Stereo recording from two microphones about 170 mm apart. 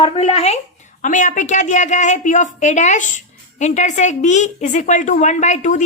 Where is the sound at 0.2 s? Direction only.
40° left (ahead or behind).